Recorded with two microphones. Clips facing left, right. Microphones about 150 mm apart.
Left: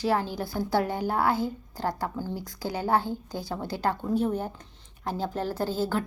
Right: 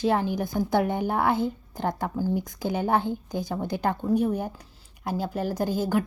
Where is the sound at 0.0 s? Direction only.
20° right (ahead or behind).